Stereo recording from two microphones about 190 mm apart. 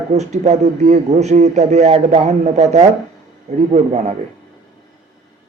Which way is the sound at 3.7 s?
35° right (ahead or behind).